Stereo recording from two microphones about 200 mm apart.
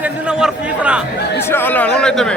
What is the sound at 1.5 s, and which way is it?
Speech, 10° left (ahead or behind).